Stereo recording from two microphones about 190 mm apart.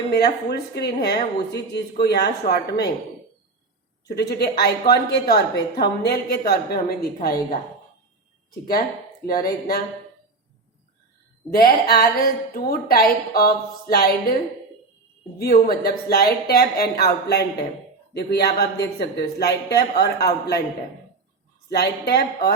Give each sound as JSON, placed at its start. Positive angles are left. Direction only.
{"t": 0.1, "sound": "a woman's voice", "side_deg": 55}
{"t": 4.1, "sound": "a woman's voice", "side_deg": 60}
{"t": 9.2, "sound": "a woman's voice", "side_deg": 50}
{"t": 11.5, "sound": "a woman's voice", "side_deg": 55}
{"t": 15.4, "sound": "a woman's voice", "side_deg": 50}
{"t": 21.7, "sound": "a woman's voice", "side_deg": 60}